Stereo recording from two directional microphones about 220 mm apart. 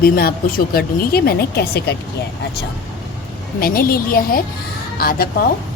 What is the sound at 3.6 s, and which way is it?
A woman's voice, 40° left (ahead or behind).